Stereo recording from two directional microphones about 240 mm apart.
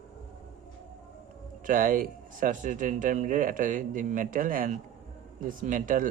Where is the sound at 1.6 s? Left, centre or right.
Right.